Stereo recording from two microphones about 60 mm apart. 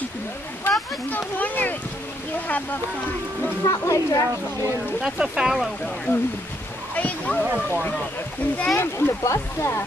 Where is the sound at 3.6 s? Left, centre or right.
Left.